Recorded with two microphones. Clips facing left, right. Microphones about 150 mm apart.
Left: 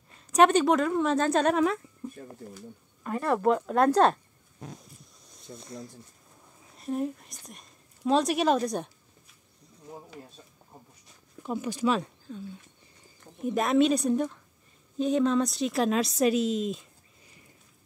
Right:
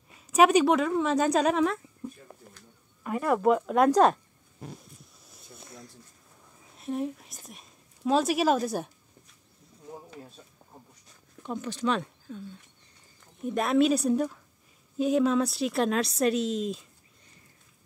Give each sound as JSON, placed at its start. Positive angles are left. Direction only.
{"t": 0.1, "sound": "a woman's voice", "side_deg": -10}
{"t": 2.4, "sound": "speech", "side_deg": 90}
{"t": 3.0, "sound": "a woman's voice", "side_deg": -10}
{"t": 5.1, "sound": "a sound", "side_deg": -5}
{"t": 6.8, "sound": "a woman's voice", "side_deg": 0}
{"t": 11.4, "sound": "a woman's voice", "side_deg": 10}
{"t": 13.5, "sound": "a woman's voice", "side_deg": 0}